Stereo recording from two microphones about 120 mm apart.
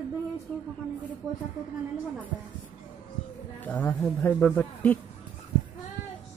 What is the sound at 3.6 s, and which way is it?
A man's voice, 15° left (ahead or behind).